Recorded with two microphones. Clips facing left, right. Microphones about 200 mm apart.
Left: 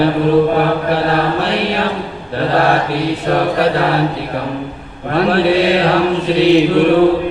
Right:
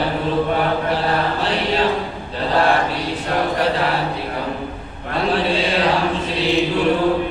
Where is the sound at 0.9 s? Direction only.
65° left (ahead or behind).